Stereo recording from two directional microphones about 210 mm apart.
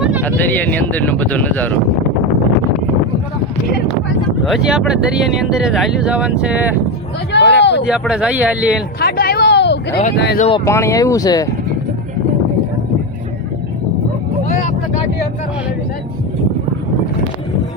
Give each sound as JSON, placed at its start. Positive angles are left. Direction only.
{"t": 0.2, "sound": "speech", "side_deg": 10}
{"t": 4.4, "sound": "speech", "side_deg": 0}
{"t": 7.3, "sound": "speech", "side_deg": 55}
{"t": 7.9, "sound": "speech", "side_deg": -5}
{"t": 9.0, "sound": "speech", "side_deg": 45}
{"t": 10.3, "sound": "speech", "side_deg": 30}
{"t": 10.7, "sound": "speech", "side_deg": 15}
{"t": 14.4, "sound": "vehicle", "side_deg": 35}